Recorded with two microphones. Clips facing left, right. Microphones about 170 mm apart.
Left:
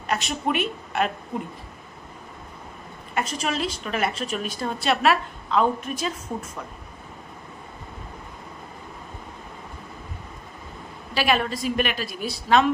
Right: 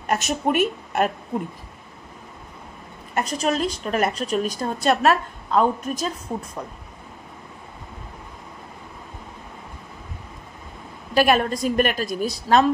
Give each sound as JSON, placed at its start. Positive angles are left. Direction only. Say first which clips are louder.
{"t": 0.1, "sound": "a woman's voice", "louder": "right 3 dB", "side_deg": -45}
{"t": 3.2, "sound": "a woman's voice", "louder": "right 4 dB", "side_deg": -40}
{"t": 11.1, "sound": "a woman's voice", "louder": "right 5 dB", "side_deg": -45}